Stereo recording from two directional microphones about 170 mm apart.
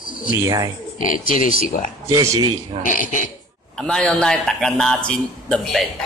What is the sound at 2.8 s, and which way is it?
Speech, 50° left (ahead or behind).